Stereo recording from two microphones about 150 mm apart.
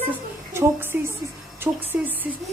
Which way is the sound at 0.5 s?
15° right (ahead or behind).